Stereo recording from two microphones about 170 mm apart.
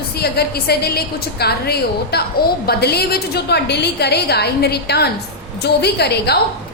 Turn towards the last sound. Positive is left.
turn(degrees=70)  # may be behind; listen again after turning